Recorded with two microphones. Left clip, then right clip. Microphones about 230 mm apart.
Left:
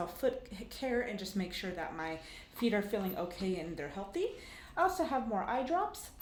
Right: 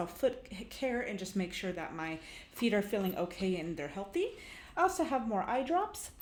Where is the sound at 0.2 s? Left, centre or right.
Right.